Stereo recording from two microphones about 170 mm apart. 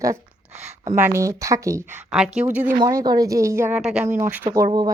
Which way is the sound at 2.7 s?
25° right (ahead or behind).